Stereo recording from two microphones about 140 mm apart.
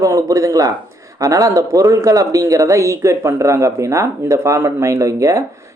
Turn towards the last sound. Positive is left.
turn(degrees=-20)  # may be behind; listen again after turning